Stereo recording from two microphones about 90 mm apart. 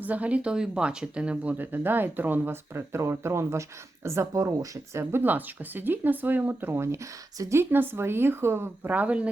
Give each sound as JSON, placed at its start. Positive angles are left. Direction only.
{"t": 0.0, "sound": "speech", "side_deg": -15}
{"t": 5.1, "sound": "speech", "side_deg": -20}